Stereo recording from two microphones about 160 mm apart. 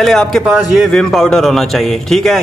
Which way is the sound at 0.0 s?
Centre (ahead or behind).